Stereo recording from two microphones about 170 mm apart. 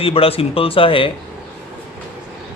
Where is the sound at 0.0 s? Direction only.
35° left (ahead or behind).